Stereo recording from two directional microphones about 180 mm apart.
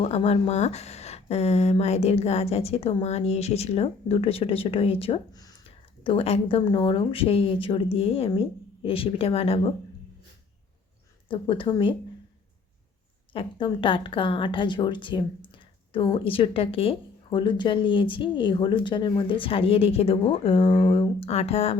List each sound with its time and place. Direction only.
0.0 s speech: 35° left (ahead or behind)
11.3 s speech: 25° left (ahead or behind)
13.3 s speech: 30° left (ahead or behind)